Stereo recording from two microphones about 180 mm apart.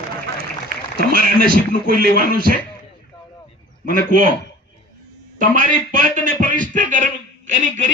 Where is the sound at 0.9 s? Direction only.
55° right (ahead or behind).